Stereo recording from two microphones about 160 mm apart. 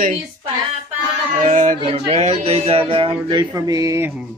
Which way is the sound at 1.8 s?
40° right (ahead or behind).